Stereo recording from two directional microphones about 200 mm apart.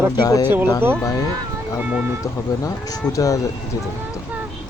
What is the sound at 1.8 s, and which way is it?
Speech, 5° right (ahead or behind).